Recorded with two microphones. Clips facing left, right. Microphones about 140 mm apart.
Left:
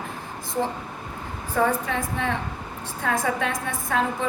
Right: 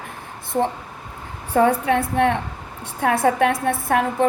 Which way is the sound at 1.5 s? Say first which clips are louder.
Right 6 dB; 70° right (ahead or behind).